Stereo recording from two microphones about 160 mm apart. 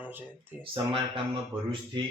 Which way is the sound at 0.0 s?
10° right (ahead or behind).